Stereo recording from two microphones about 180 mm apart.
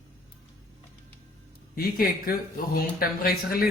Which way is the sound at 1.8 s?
55° left (ahead or behind).